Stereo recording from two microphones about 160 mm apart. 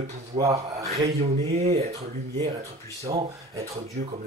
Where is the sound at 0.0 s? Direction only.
45° right (ahead or behind).